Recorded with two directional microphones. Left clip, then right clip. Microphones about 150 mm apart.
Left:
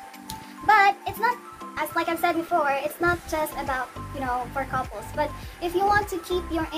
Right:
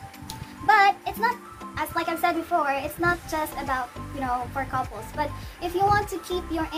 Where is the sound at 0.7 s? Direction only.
15° right (ahead or behind).